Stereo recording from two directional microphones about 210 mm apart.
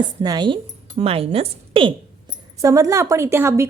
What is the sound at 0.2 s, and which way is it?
A woman's voice, 20° right (ahead or behind).